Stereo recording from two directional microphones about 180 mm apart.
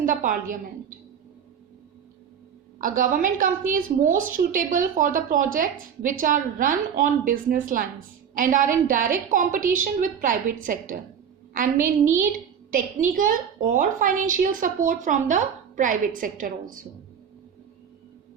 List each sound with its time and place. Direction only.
0.0 s speech: 50° right (ahead or behind)
2.8 s speech: 50° right (ahead or behind)